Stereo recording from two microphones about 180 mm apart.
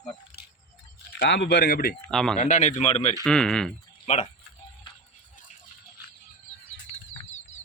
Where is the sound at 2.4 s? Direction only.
40° left (ahead or behind).